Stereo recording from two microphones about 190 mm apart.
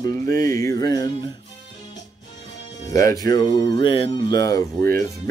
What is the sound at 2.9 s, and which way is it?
Speech, 15° left (ahead or behind).